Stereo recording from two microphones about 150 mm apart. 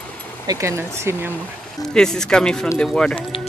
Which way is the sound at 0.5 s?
20° right (ahead or behind).